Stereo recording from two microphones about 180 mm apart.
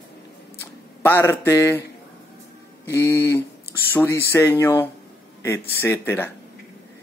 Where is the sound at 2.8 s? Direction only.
15° left (ahead or behind).